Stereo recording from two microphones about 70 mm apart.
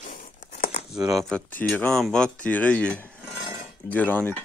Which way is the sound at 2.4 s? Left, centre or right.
Left.